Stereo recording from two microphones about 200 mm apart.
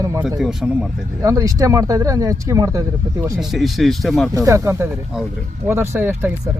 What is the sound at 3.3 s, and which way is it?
Speech, centre (ahead or behind).